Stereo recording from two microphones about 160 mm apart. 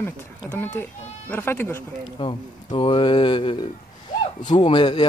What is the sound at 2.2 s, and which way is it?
Speech, 30° left (ahead or behind).